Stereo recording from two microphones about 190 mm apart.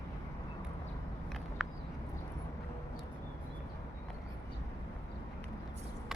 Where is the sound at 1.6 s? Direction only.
5° right (ahead or behind).